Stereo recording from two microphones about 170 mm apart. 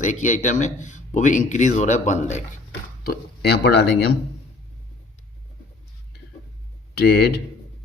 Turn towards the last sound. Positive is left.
turn(degrees=75)  # may be behind; listen again after turning